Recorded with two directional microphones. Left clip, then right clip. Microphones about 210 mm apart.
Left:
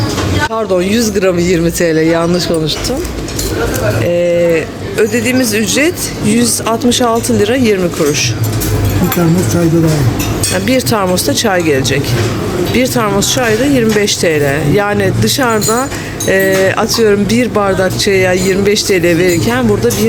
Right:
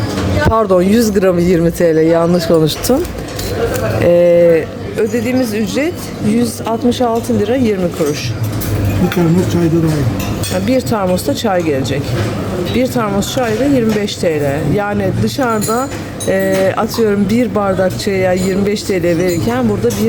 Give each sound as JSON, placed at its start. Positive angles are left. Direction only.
{"t": 0.5, "sound": "speech", "side_deg": -25}
{"t": 4.0, "sound": "speech", "side_deg": -25}
{"t": 4.9, "sound": "speech", "side_deg": -5}
{"t": 10.7, "sound": "speech", "side_deg": -5}